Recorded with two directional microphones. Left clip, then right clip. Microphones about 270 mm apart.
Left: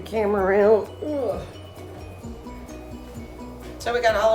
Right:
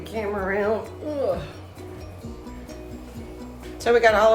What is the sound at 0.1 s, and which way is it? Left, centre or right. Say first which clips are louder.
Speech: left 6 dB; left.